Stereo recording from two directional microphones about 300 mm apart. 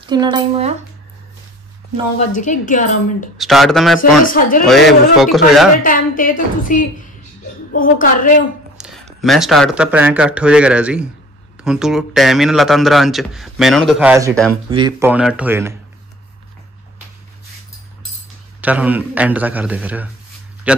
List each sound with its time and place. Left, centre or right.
0.0 s speech: centre
2.1 s a woman's voice: left
3.3 s speech: centre
4.3 s a woman's voice: left
4.6 s speech: centre
5.8 s a woman's voice: left
9.2 s speech: centre
18.6 s a man's voice: centre